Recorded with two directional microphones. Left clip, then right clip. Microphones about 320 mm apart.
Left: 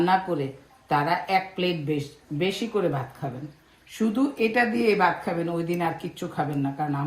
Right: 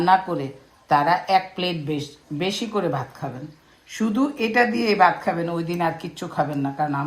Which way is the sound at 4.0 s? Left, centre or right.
Right.